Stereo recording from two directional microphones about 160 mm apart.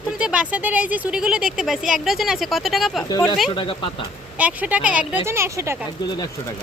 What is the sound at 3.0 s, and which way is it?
Speech, 25° left (ahead or behind).